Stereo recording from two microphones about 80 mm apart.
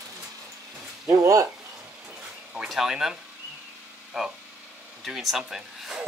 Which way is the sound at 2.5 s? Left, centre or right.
Centre.